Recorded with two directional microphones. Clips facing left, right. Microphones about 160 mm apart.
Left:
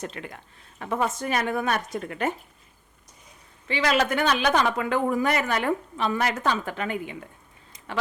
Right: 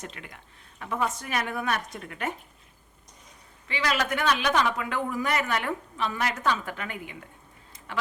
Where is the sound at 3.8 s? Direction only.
30° left (ahead or behind).